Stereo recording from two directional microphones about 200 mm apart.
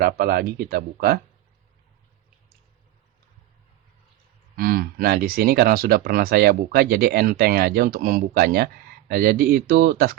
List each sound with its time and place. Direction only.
0.0 s speech: 50° right (ahead or behind)
4.5 s speech: 45° right (ahead or behind)